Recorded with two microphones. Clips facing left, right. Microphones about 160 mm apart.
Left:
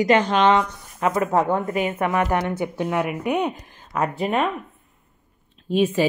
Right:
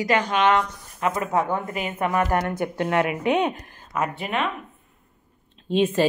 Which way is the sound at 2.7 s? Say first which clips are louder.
Right 4 dB; 75° right (ahead or behind).